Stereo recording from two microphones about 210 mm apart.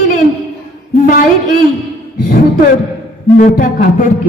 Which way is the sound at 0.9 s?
40° left (ahead or behind).